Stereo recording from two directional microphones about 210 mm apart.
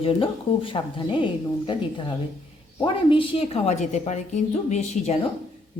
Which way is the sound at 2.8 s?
25° left (ahead or behind).